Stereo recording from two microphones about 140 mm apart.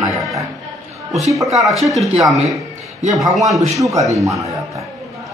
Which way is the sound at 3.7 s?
25° right (ahead or behind).